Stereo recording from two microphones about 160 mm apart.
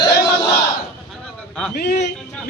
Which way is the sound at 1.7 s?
85° left.